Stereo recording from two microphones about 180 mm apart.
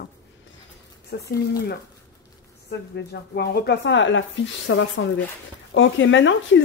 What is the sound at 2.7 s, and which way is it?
Speech, 65° left (ahead or behind).